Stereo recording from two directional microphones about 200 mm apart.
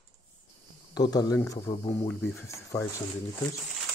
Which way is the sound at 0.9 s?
20° left (ahead or behind).